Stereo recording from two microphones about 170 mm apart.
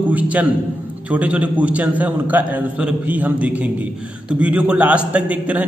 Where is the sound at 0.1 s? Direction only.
10° right (ahead or behind).